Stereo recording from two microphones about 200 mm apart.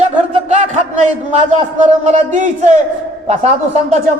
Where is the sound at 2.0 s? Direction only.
35° right (ahead or behind).